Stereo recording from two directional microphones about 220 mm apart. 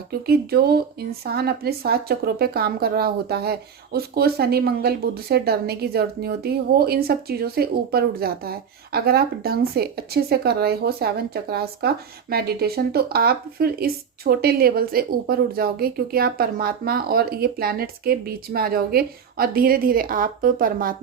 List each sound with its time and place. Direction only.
0.1 s speech: 45° right (ahead or behind)